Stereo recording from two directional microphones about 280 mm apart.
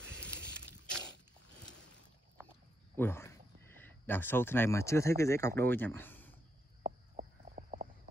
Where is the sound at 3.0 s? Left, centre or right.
Centre.